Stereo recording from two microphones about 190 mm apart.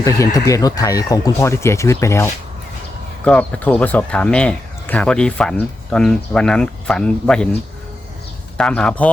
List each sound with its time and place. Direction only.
0.0 s speech: 15° left (ahead or behind)
8.5 s speech: 5° left (ahead or behind)